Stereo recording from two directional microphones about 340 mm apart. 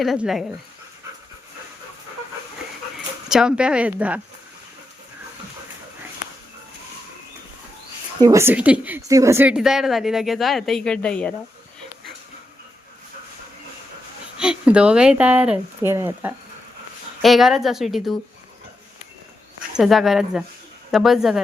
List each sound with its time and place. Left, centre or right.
0.0 s a woman's voice: centre
3.2 s a woman's voice: centre
8.2 s a woman's voice: centre
14.3 s a woman's voice: centre
19.7 s a woman's voice: centre